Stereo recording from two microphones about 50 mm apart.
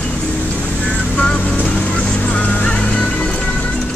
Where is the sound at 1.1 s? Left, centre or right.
Centre.